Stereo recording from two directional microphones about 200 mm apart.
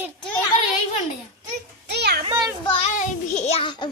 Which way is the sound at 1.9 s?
55° right (ahead or behind).